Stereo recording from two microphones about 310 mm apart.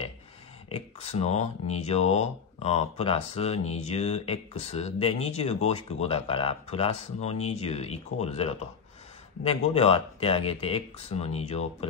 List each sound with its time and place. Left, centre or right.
0.7 s speech: centre